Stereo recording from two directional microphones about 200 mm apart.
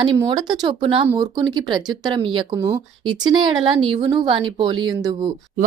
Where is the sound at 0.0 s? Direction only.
25° right (ahead or behind).